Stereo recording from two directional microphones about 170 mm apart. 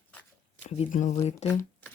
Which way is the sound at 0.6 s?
40° left (ahead or behind).